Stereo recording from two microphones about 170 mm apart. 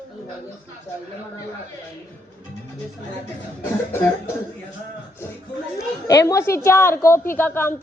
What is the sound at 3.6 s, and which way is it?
Speech, 15° left (ahead or behind).